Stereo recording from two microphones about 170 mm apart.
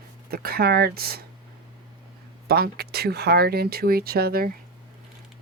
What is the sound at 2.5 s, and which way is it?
Speech, 65° right (ahead or behind).